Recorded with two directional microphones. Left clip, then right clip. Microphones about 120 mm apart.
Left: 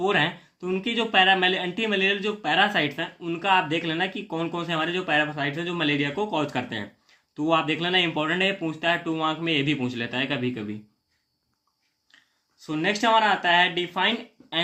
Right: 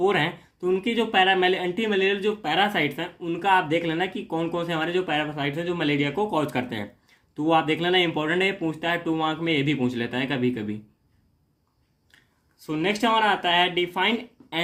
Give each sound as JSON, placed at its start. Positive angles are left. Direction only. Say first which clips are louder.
{"t": 0.0, "sound": "speech", "louder": "even", "side_deg": -30}
{"t": 12.1, "sound": "speech", "louder": "left 1 dB", "side_deg": -30}